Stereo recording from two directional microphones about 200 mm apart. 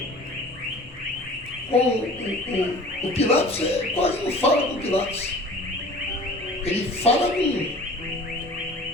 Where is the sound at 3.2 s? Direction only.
30° left (ahead or behind).